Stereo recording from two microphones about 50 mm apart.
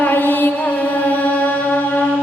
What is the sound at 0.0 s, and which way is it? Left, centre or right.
Mantra, left.